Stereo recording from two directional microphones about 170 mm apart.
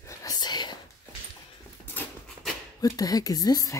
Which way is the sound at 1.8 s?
10° left (ahead or behind).